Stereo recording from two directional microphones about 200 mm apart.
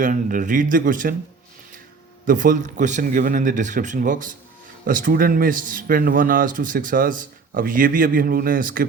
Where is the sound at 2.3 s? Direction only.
40° right (ahead or behind).